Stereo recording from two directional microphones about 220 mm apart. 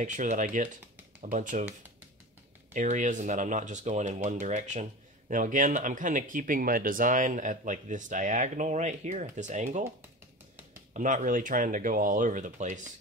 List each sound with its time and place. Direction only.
0.0 s speech: 35° right (ahead or behind)
2.7 s speech: 35° right (ahead or behind)
10.9 s speech: 35° right (ahead or behind)